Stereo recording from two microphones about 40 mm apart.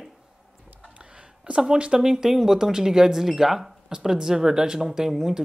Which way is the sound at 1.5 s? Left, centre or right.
Right.